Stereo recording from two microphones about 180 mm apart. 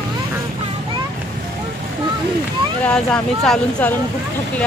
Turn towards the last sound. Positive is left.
turn(degrees=5)  # may be behind; listen again after turning